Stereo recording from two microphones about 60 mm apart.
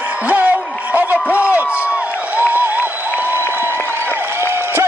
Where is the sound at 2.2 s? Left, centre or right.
Right.